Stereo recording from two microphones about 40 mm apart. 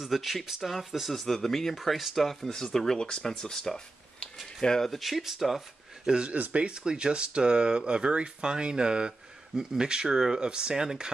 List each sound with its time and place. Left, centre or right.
0.0 s speech: centre
1.1 s speech: centre
4.2 s a sound: left
4.6 s speech: centre
4.9 s speech: centre
6.0 s speech: right
6.3 s speech: right
6.6 s speech: right